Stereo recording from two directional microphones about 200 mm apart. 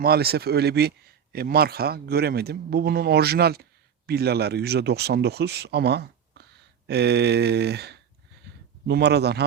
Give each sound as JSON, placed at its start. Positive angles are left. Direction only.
{"t": 0.0, "sound": "speech", "side_deg": -50}